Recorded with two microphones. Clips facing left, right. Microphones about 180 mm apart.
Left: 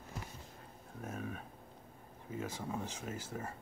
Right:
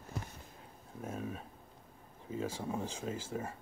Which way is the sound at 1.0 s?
30° right (ahead or behind).